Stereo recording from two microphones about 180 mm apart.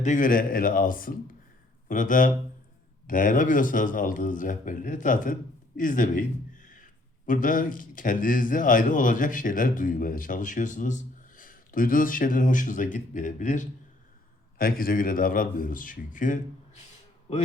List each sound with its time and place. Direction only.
0.0 s a man's voice: 45° left (ahead or behind)